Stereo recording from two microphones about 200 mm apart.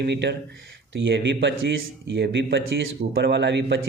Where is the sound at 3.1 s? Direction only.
60° right (ahead or behind).